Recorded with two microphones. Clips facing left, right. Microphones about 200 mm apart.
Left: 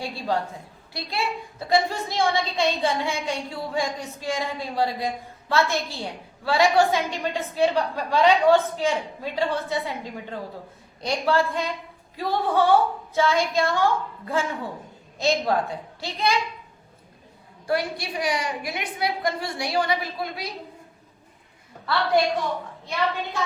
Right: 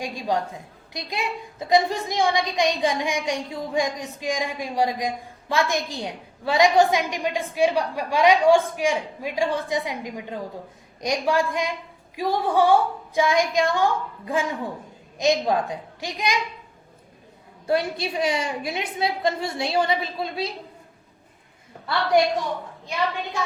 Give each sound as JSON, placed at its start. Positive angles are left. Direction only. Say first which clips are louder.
{"t": 0.0, "sound": "a woman's voice", "louder": "right 1 dB", "side_deg": -15}
{"t": 17.7, "sound": "a woman's voice", "louder": "right 2 dB", "side_deg": -25}